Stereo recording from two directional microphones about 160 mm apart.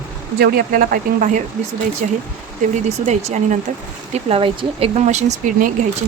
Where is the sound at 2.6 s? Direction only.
45° right (ahead or behind).